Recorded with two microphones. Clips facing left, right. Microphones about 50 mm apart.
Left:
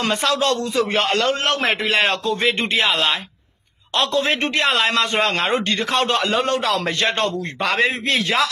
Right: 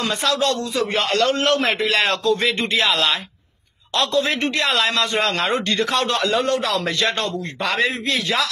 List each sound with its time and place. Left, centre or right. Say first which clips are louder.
0.0 s a man's voice: left 1 dB; left
1.7 s a man's voice: left 1 dB; left
3.9 s a man's voice: even; left
6.8 s a man's voice: left 1 dB; left